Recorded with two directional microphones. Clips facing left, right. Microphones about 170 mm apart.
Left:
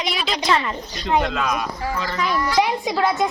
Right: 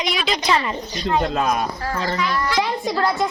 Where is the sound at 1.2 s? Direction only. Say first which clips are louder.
Right 3 dB; 35° right (ahead or behind).